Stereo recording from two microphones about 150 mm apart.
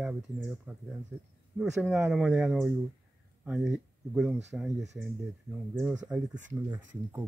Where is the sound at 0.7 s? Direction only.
10° right (ahead or behind).